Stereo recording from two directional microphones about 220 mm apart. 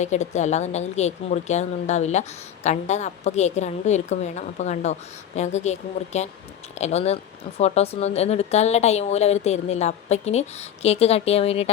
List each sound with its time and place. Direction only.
0.0 s a woman's voice: 30° left (ahead or behind)
6.7 s speech: 30° left (ahead or behind)